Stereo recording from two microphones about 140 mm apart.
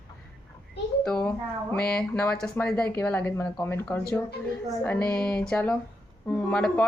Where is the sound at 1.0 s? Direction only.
10° left (ahead or behind).